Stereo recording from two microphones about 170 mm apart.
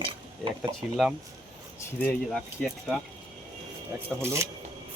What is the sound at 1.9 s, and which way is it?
Speech, 10° left (ahead or behind).